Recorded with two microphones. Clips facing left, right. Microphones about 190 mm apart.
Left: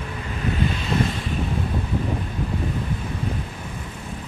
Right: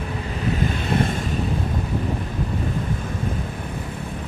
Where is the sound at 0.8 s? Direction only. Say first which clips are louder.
Right 1 dB; 55° right (ahead or behind).